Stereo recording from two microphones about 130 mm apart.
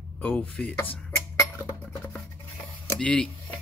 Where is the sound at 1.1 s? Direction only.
15° left (ahead or behind).